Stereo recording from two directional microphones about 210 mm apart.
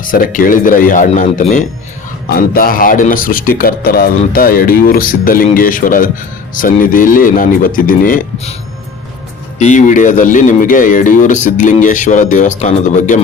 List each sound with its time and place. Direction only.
0.0 s speech: 40° left (ahead or behind)
9.6 s speech: 35° left (ahead or behind)